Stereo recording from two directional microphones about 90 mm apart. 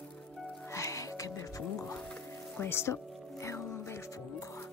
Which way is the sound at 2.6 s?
25° left (ahead or behind).